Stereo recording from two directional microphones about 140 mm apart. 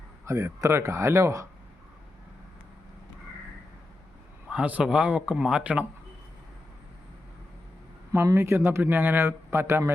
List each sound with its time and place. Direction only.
0.3 s speech: 20° right (ahead or behind)
4.4 s a man's voice: 10° right (ahead or behind)
8.1 s a man's voice: 20° right (ahead or behind)